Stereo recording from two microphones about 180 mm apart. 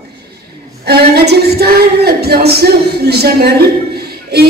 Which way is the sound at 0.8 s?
60° right (ahead or behind).